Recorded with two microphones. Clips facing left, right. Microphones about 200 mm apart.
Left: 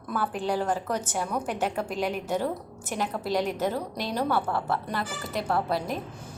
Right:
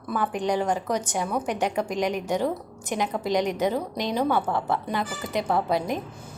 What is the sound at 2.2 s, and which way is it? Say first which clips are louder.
Speech: right 3 dB; 15° right (ahead or behind).